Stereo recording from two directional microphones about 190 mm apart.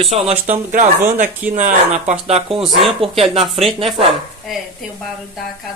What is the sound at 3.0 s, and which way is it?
Speech, 30° right (ahead or behind).